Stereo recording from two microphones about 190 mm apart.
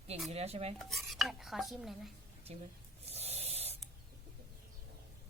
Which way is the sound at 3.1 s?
35° right (ahead or behind).